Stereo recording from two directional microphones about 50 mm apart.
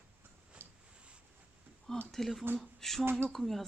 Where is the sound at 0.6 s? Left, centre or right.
Right.